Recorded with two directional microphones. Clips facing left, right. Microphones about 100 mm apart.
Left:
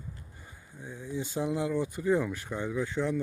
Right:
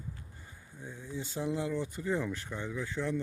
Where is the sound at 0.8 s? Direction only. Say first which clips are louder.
Left 5 dB; 15° left (ahead or behind).